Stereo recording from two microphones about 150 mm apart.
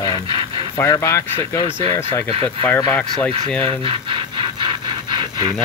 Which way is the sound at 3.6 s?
35° right (ahead or behind).